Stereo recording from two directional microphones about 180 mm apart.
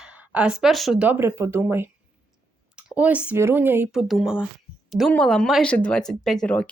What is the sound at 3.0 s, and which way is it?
Speech, 5° right (ahead or behind).